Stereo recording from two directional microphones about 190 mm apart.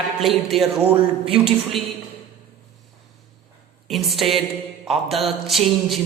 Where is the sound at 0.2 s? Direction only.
Centre (ahead or behind).